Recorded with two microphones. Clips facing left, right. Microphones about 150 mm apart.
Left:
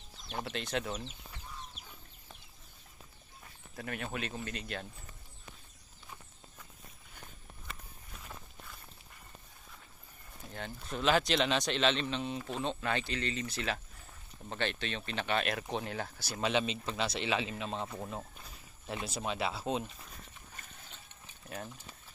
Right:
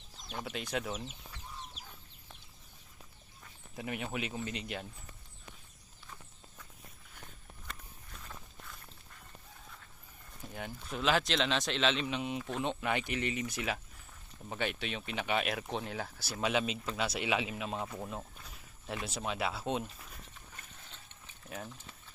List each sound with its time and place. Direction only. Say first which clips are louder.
0.3 s speech: left 1 dB; centre (ahead or behind)
3.8 s speech: right 1 dB; 15° right (ahead or behind)
8.2 s walk: left 1 dB; 5° left (ahead or behind)
10.8 s speech: left 2 dB; centre (ahead or behind)
17.9 s speech: even; 5° left (ahead or behind)